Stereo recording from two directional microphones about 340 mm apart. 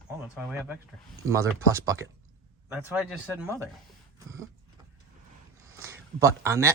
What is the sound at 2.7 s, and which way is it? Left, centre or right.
Speech, centre.